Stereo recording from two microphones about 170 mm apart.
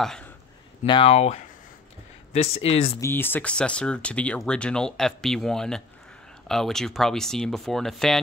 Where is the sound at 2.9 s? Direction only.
15° left (ahead or behind).